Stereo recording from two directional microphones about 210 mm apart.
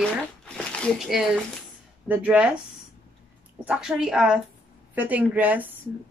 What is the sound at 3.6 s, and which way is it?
A woman's voice, 5° right (ahead or behind).